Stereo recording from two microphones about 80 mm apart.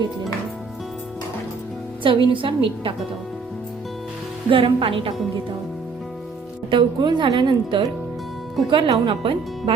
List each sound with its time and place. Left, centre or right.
2.0 s speech: right
4.4 s speech: right
6.7 s a woman's voice: right